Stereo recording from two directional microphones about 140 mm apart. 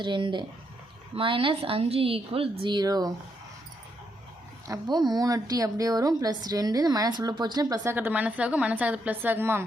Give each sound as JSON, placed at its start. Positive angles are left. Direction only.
{"t": 0.0, "sound": "a woman's voice", "side_deg": -35}
{"t": 2.6, "sound": "a woman's voice", "side_deg": -30}
{"t": 4.7, "sound": "a woman's voice", "side_deg": -30}
{"t": 7.9, "sound": "a woman's voice", "side_deg": -10}